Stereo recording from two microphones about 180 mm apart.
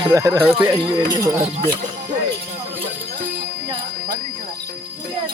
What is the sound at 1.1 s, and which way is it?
Speech, 25° right (ahead or behind).